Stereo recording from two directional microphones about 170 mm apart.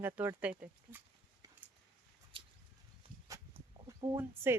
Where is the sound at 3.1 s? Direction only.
55° left (ahead or behind).